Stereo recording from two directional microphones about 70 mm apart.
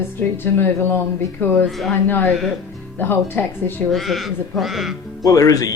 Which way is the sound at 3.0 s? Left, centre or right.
Left.